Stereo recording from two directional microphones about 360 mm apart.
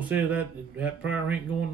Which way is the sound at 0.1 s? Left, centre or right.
Centre.